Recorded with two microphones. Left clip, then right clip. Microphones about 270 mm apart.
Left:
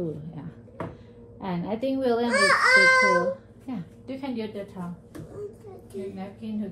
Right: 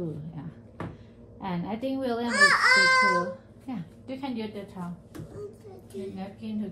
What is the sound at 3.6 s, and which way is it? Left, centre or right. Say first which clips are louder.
A woman's voice: left 2 dB; right.